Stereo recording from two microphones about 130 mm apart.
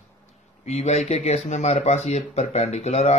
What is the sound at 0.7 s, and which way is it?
Speech, 60° left (ahead or behind).